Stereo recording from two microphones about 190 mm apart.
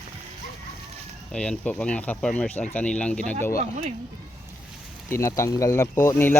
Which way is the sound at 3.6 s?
30° right (ahead or behind).